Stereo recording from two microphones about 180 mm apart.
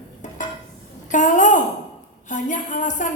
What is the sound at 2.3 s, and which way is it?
Speech, 45° left (ahead or behind).